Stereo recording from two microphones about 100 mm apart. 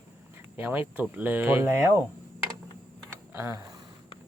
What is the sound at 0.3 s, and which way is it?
Speech, 20° right (ahead or behind).